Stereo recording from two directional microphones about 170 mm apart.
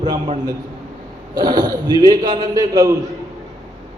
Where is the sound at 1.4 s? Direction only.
25° right (ahead or behind).